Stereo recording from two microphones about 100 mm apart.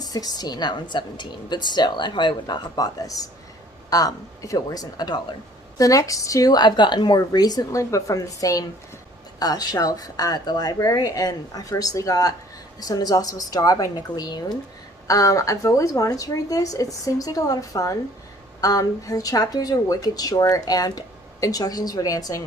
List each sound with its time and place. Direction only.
0.0 s a woman's voice: 40° left (ahead or behind)